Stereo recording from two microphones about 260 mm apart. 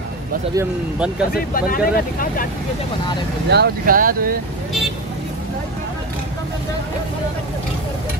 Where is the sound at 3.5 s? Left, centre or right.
Right.